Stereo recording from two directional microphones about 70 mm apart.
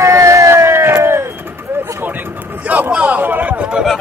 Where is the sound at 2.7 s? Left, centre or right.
Right.